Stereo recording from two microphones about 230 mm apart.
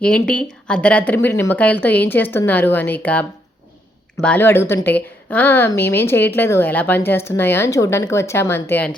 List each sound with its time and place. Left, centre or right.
0.0 s speech: centre